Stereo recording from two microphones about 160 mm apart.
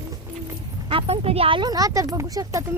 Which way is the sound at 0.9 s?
35° right (ahead or behind).